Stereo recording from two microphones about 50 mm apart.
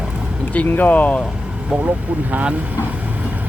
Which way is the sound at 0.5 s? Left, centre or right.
Left.